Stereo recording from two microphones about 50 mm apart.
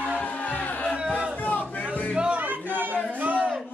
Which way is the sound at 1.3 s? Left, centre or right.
Left.